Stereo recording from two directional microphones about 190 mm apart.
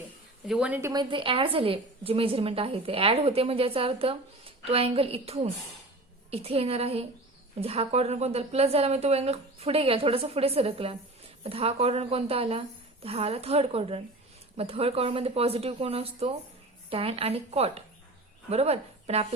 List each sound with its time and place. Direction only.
0.4 s a woman's voice: 5° right (ahead or behind); by 19.3 s 35° right (ahead or behind)